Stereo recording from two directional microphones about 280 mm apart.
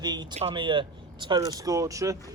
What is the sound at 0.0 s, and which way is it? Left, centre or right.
Speech, centre.